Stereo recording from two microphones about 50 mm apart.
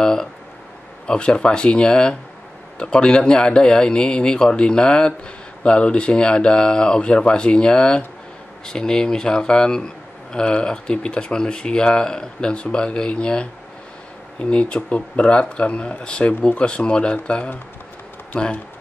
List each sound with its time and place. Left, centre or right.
0.0 s a sound: centre
1.0 s speech: centre
14.5 s speech: left